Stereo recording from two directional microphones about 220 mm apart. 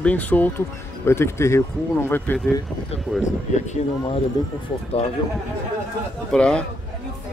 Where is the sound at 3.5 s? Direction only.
30° left (ahead or behind).